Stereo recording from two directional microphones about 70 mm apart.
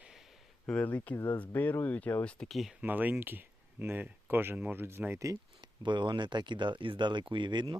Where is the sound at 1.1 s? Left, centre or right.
Left.